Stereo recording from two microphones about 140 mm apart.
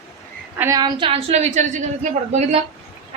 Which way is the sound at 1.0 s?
40° right (ahead or behind).